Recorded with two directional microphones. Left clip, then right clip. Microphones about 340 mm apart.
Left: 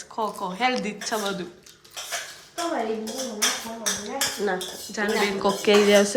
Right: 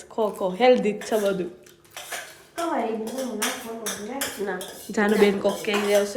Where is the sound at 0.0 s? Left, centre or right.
Centre.